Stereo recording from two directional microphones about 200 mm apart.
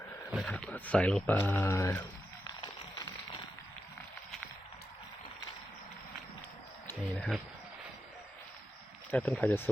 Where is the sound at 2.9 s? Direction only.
20° left (ahead or behind).